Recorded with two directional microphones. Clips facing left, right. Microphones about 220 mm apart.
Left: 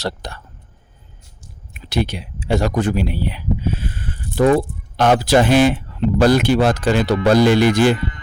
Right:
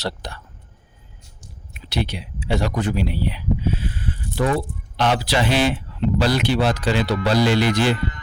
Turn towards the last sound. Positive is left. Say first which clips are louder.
# left 5 dB
turn(degrees=50)  # may be behind; listen again after turning